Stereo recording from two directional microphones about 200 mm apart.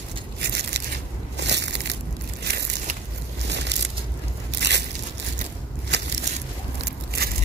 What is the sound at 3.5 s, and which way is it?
Crushing, 60° right (ahead or behind).